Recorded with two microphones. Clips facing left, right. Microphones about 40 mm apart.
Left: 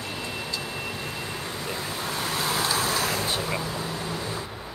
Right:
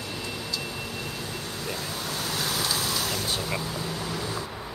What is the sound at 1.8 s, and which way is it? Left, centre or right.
Vehicle, left.